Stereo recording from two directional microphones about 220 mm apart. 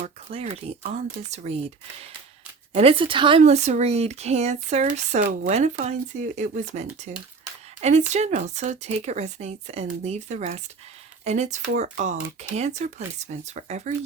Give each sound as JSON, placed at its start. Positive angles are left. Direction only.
{"t": 0.0, "sound": "speech", "side_deg": -30}
{"t": 2.7, "sound": "speech", "side_deg": -25}